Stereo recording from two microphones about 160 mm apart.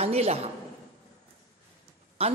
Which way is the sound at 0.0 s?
40° right (ahead or behind).